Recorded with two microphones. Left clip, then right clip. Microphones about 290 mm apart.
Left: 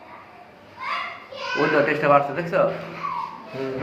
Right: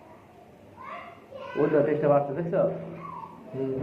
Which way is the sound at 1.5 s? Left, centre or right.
Left.